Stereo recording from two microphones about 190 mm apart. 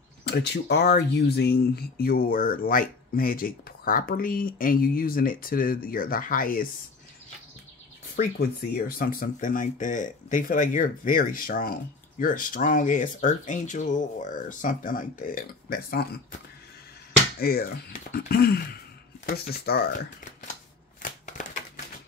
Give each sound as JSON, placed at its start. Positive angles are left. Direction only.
{"t": 0.2, "sound": "speech", "side_deg": 60}
{"t": 8.2, "sound": "speech", "side_deg": 50}
{"t": 17.4, "sound": "speech", "side_deg": 55}